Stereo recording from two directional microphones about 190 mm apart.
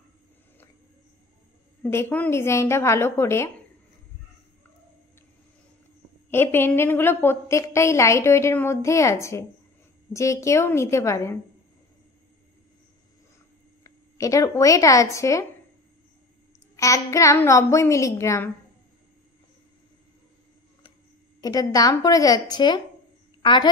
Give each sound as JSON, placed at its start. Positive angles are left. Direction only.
{"t": 1.8, "sound": "a woman's voice", "side_deg": 10}
{"t": 6.3, "sound": "a woman's voice", "side_deg": 10}
{"t": 13.8, "sound": "a woman's voice", "side_deg": 15}
{"t": 16.7, "sound": "a woman's voice", "side_deg": 15}
{"t": 21.4, "sound": "a woman's voice", "side_deg": 20}